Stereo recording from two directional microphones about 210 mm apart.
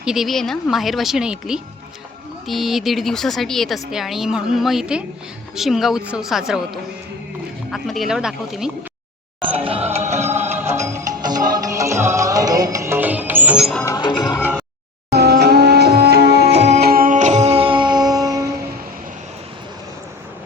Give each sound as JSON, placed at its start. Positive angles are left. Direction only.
{"t": 0.0, "sound": "a woman's voice", "side_deg": 0}
{"t": 7.7, "sound": "a woman's voice", "side_deg": 0}
{"t": 9.5, "sound": "music", "side_deg": -25}
{"t": 10.2, "sound": "music", "side_deg": -10}
{"t": 13.8, "sound": "music", "side_deg": 20}
{"t": 15.1, "sound": "music", "side_deg": -50}
{"t": 16.5, "sound": "music", "side_deg": -30}
{"t": 16.7, "sound": "music", "side_deg": -45}